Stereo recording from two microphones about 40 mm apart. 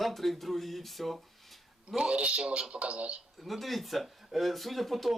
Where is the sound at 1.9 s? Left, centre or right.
Right.